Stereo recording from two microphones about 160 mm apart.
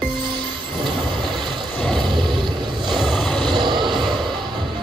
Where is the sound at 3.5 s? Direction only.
30° right (ahead or behind).